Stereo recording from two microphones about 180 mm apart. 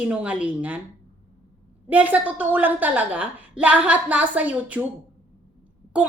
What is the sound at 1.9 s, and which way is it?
A woman's voice, 10° right (ahead or behind).